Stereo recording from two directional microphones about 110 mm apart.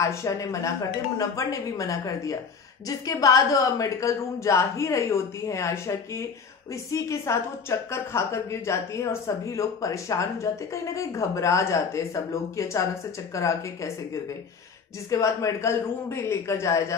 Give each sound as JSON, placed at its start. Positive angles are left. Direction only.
{"t": 0.0, "sound": "a woman's voice", "side_deg": 30}